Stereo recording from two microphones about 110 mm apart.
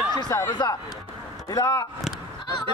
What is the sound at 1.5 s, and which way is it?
Speech, 25° left (ahead or behind).